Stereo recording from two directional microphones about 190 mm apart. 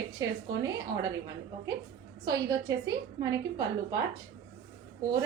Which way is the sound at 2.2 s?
20° right (ahead or behind).